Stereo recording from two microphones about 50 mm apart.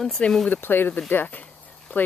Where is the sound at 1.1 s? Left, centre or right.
Left.